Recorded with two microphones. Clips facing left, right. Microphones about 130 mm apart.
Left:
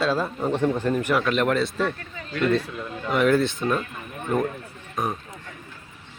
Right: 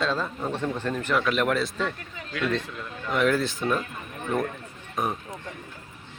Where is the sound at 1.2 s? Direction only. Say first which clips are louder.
Left 2 dB; centre (ahead or behind).